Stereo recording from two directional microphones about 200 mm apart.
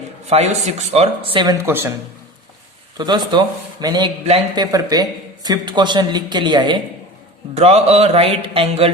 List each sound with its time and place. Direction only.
0.3 s speech: 30° right (ahead or behind); by 1.9 s 10° right (ahead or behind)
3.0 s a man's voice: 20° right (ahead or behind)
4.2 s speech: 30° right (ahead or behind)
4.6 s a man's voice: 20° right (ahead or behind)